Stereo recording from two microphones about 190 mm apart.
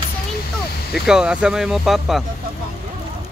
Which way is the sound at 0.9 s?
5° right (ahead or behind).